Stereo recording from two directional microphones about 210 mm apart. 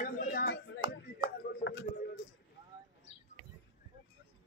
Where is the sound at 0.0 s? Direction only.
45° left (ahead or behind).